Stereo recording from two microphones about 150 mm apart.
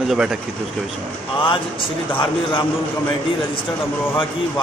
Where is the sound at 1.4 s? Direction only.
35° left (ahead or behind).